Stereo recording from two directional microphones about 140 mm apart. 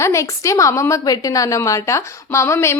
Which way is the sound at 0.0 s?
20° left (ahead or behind).